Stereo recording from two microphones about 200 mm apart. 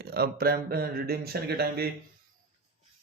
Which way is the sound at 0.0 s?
50° right (ahead or behind).